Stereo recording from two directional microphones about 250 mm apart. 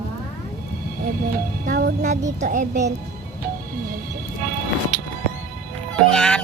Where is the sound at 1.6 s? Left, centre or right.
Right.